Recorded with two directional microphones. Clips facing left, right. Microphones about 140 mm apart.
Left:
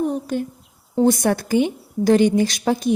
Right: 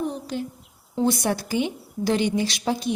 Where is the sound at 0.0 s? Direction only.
50° left (ahead or behind).